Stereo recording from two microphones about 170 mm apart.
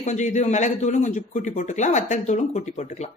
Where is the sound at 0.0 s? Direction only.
45° left (ahead or behind).